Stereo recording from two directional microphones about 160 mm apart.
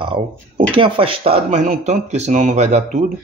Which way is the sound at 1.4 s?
50° right (ahead or behind).